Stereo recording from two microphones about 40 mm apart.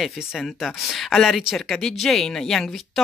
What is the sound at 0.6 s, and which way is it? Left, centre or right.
Speech, centre.